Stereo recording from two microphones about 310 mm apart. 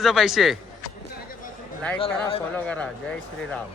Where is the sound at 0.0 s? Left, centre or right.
Centre.